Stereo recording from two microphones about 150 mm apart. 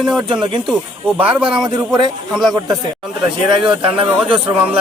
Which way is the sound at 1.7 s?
30° right (ahead or behind).